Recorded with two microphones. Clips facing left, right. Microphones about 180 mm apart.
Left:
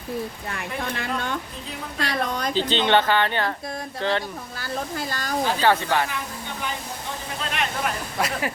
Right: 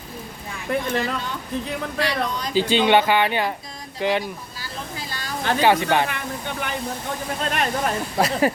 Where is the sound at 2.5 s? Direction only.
10° right (ahead or behind).